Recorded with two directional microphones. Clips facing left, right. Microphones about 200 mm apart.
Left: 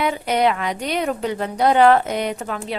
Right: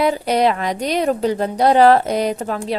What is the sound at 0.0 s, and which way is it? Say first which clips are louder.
Speech: right 3 dB; 35° right (ahead or behind).